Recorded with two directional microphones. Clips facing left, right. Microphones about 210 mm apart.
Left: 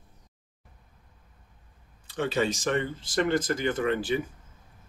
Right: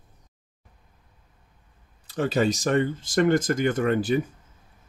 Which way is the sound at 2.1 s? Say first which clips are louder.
Right 4 dB; 40° right (ahead or behind).